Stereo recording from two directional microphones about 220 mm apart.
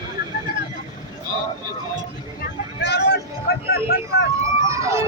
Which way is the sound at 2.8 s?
50° left (ahead or behind).